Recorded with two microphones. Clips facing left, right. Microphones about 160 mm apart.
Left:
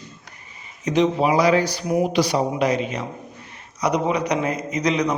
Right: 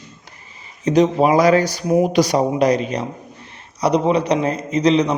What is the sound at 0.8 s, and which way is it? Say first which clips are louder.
A man's voice: right 4 dB; 40° right (ahead or behind).